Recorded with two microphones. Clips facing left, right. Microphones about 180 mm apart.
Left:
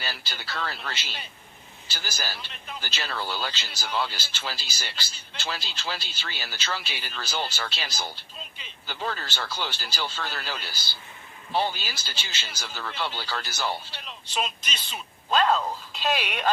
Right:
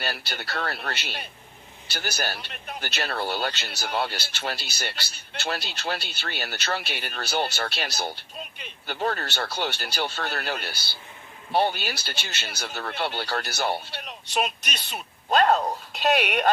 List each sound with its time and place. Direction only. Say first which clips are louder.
0.0 s a man's voice: right 5 dB; 60° right (ahead or behind)